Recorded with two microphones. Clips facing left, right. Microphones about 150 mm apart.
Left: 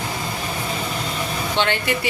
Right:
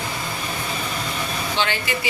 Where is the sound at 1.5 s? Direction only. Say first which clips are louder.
Left 4 dB; 60° left (ahead or behind).